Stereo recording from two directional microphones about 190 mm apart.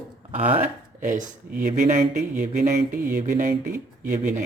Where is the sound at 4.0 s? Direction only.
40° right (ahead or behind).